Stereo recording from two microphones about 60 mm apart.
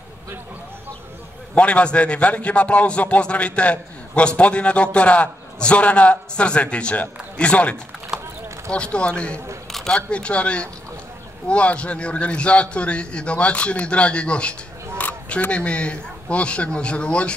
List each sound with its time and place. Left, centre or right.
1.5 s a man's voice: left
9.7 s single-lens reflex camera: centre
9.9 s a man's voice: centre
15.0 s a sound: left
15.5 s a man's voice: centre